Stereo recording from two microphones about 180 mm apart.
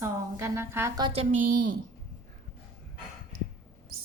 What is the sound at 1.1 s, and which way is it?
Speech, 40° right (ahead or behind).